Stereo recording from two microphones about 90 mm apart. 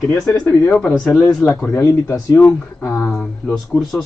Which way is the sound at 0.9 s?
5° left (ahead or behind).